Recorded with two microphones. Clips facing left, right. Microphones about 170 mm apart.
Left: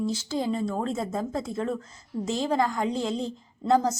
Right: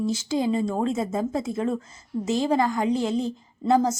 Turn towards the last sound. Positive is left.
turn(degrees=-10)  # may be behind; listen again after turning